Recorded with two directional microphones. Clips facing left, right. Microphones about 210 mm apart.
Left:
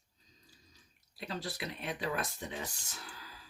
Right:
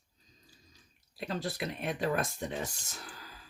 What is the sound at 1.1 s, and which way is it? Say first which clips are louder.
Speech: right 5 dB; 50° right (ahead or behind).